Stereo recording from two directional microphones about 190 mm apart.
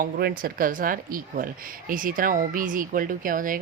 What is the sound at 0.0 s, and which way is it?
Speech, 50° right (ahead or behind).